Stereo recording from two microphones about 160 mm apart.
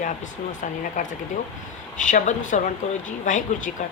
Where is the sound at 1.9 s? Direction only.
50° left (ahead or behind).